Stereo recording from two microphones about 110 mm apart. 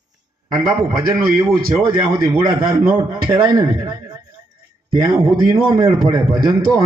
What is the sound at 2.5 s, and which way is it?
A man's voice, 35° right (ahead or behind).